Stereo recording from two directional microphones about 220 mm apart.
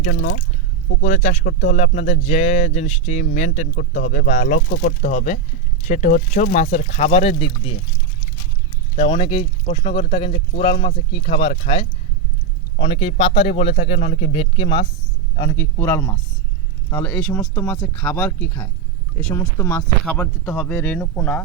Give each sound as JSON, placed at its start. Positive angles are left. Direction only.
{"t": 0.1, "sound": "speech", "side_deg": 50}
{"t": 1.0, "sound": "speech", "side_deg": 35}
{"t": 9.0, "sound": "speech", "side_deg": 25}
{"t": 15.4, "sound": "speech", "side_deg": 15}